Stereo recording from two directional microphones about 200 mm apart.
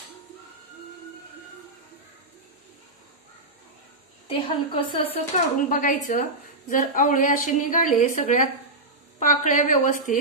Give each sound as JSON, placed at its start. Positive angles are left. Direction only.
{"t": 4.3, "sound": "a woman's voice", "side_deg": 25}
{"t": 5.1, "sound": "a woman's voice", "side_deg": 40}